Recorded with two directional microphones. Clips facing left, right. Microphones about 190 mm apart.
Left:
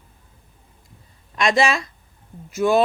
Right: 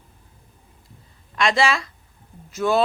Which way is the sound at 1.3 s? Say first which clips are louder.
Left 1 dB; 20° left (ahead or behind).